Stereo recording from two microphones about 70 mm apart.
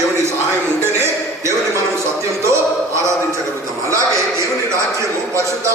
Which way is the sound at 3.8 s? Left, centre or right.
Right.